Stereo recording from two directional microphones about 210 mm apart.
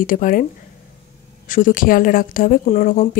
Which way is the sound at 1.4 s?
40° left (ahead or behind).